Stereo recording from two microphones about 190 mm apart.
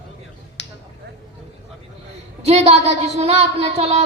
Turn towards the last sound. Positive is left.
turn(degrees=-35)  # may be behind; listen again after turning